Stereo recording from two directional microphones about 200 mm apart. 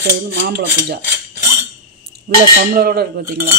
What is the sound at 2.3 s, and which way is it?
Speech, 45° right (ahead or behind).